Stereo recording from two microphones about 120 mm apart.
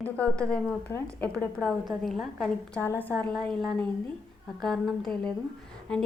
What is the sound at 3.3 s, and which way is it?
A woman's voice, centre (ahead or behind).